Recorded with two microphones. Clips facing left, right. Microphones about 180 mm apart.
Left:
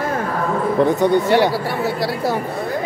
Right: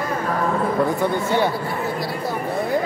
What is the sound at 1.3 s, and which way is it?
Speech, 75° left (ahead or behind).